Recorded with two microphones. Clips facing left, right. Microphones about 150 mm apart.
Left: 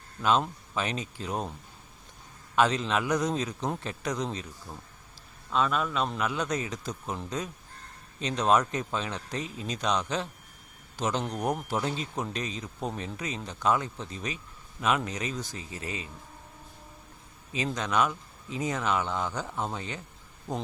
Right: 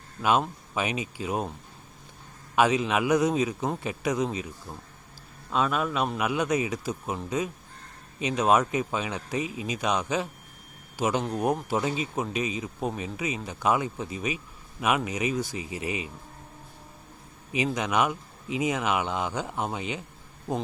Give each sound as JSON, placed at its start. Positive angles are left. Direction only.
{"t": 0.2, "sound": "speech", "side_deg": -10}
{"t": 2.6, "sound": "speech", "side_deg": -10}
{"t": 17.5, "sound": "speech", "side_deg": -15}